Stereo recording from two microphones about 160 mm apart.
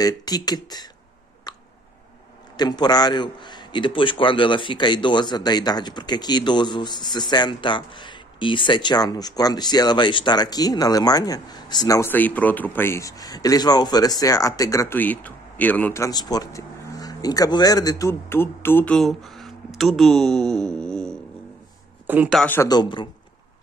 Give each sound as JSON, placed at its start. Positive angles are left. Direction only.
{"t": 0.0, "sound": "a man's voice", "side_deg": 25}
{"t": 1.5, "sound": "a sound", "side_deg": 25}
{"t": 2.5, "sound": "a man's voice", "side_deg": 25}
{"t": 18.9, "sound": "speech", "side_deg": 0}
{"t": 22.0, "sound": "speech", "side_deg": -10}
{"t": 22.4, "sound": "speech", "side_deg": 10}
{"t": 22.7, "sound": "a man's voice", "side_deg": 30}